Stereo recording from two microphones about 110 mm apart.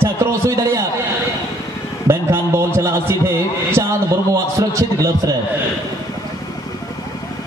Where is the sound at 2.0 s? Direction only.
25° right (ahead or behind).